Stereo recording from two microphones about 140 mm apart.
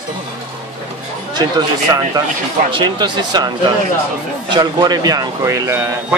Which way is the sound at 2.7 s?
30° right (ahead or behind).